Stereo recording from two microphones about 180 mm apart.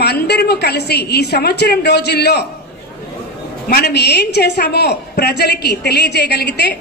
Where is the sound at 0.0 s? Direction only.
65° left (ahead or behind).